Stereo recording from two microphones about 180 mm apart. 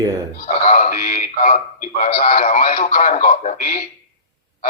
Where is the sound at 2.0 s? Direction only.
55° left (ahead or behind).